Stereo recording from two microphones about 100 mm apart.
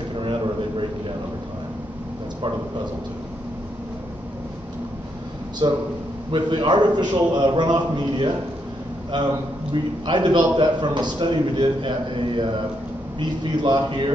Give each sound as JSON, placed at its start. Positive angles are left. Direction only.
{"t": 0.1, "sound": "a sound", "side_deg": -60}
{"t": 5.6, "sound": "a man's voice", "side_deg": -50}
{"t": 10.0, "sound": "a man's voice", "side_deg": -50}